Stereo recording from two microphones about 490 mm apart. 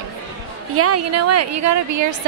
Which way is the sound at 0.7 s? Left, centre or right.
Right.